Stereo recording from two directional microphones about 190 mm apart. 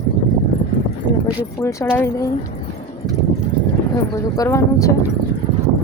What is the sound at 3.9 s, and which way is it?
A woman's voice, 15° left (ahead or behind).